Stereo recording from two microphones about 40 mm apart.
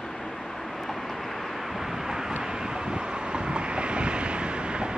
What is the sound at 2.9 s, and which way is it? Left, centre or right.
Vehicle, right.